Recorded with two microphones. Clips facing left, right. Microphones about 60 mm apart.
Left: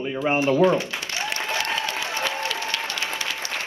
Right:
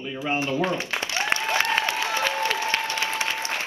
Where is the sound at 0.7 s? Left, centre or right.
Right.